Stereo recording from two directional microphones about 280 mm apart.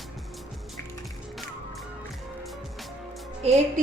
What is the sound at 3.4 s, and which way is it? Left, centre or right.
Speech, right.